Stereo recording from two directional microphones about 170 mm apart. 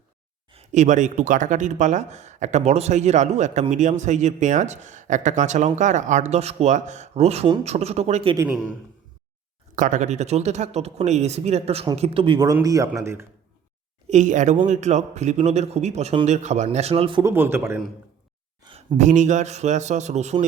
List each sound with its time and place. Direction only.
0.5 s speech: 45° right (ahead or behind)
9.7 s a man's voice: 50° right (ahead or behind); by 13.2 s 15° right (ahead or behind)
14.1 s speech: 45° right (ahead or behind)
17.2 s a man's voice: 15° right (ahead or behind)
18.6 s a sound: 25° right (ahead or behind)
18.9 s speech: 45° right (ahead or behind)